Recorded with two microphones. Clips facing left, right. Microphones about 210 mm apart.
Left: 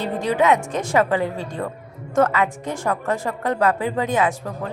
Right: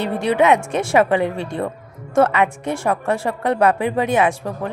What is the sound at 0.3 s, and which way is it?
Speech, 10° right (ahead or behind).